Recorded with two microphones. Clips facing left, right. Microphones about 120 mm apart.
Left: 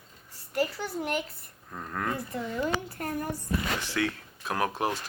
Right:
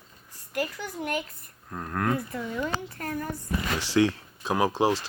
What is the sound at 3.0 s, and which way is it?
Speech, 30° left (ahead or behind).